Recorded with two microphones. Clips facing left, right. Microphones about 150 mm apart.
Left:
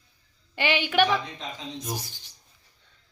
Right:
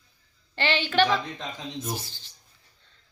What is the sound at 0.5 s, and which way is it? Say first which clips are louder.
A woman's voice: even; 10° left (ahead or behind).